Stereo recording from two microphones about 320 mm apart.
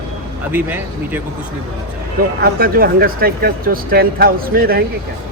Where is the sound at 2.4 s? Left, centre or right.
Right.